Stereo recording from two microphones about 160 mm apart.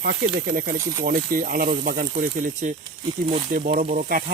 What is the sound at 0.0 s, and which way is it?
Speech, 80° right.